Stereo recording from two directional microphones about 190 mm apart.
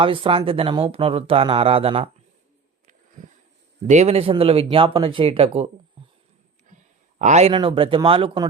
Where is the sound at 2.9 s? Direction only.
40° right (ahead or behind).